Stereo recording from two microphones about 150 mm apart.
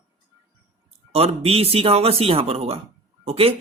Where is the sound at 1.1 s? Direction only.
40° right (ahead or behind).